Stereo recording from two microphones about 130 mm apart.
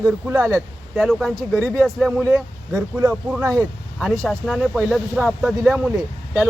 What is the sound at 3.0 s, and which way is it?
Speech, 15° right (ahead or behind).